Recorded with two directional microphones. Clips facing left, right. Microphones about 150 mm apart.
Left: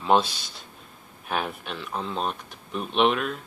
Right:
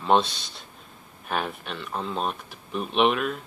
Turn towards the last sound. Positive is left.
turn(degrees=0)  # may be behind; listen again after turning